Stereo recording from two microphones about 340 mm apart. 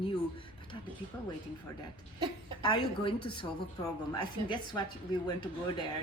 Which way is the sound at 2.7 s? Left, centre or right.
Centre.